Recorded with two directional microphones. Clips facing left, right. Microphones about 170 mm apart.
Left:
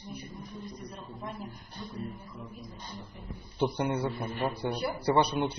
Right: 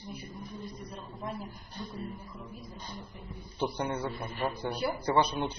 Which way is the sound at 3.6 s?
10° left (ahead or behind).